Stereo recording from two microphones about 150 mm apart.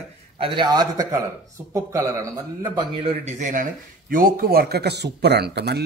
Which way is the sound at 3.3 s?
55° right (ahead or behind).